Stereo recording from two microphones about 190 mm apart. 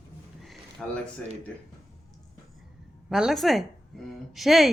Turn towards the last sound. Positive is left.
turn(degrees=0)  # may be behind; listen again after turning